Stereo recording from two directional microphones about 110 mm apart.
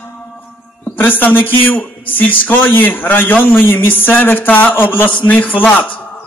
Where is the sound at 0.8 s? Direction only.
15° left (ahead or behind).